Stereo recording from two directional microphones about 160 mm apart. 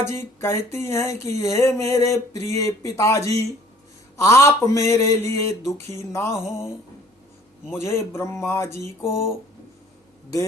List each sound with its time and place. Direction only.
0.1 s speech: 15° left (ahead or behind)
7.7 s speech: 15° left (ahead or behind)